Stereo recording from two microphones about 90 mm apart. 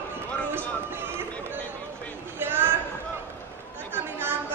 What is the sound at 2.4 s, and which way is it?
Chatter, 25° right (ahead or behind).